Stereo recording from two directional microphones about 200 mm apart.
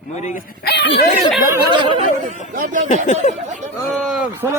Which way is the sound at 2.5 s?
40° right (ahead or behind).